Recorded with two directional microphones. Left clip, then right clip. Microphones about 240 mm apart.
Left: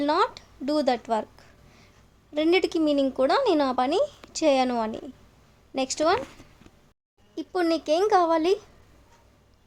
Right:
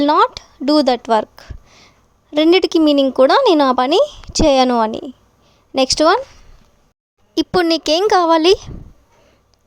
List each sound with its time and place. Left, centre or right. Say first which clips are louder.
0.0 s a woman's voice: right 11 dB; right
7.3 s speech: right 10 dB; right